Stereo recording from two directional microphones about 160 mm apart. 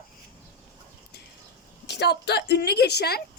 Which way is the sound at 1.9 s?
90° left.